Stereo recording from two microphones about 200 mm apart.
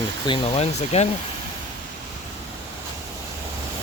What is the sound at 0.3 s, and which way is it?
Speech, 30° left (ahead or behind).